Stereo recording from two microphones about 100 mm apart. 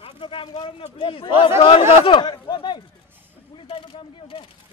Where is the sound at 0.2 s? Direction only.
60° left (ahead or behind).